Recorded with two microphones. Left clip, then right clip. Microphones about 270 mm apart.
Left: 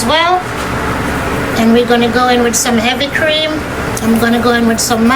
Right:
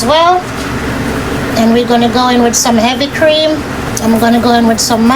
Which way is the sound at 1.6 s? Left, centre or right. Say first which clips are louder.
Right 1 dB; centre.